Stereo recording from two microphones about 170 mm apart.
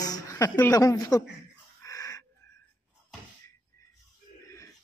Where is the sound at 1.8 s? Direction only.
20° left (ahead or behind).